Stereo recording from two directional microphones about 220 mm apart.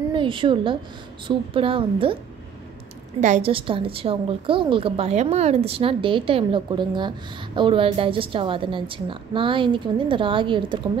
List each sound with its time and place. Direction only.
0.1 s a woman's voice: 20° right (ahead or behind)
3.2 s a woman's voice: 30° right (ahead or behind)